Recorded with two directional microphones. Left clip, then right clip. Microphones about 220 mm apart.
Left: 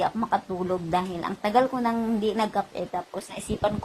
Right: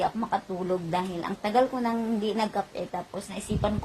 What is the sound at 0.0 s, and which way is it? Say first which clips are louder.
A woman's voice: left 2 dB; 25° left (ahead or behind).